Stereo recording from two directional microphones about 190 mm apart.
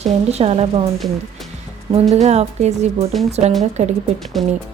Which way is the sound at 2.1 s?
35° right (ahead or behind).